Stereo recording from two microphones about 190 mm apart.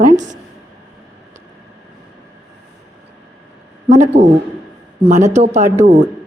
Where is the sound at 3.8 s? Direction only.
40° right (ahead or behind).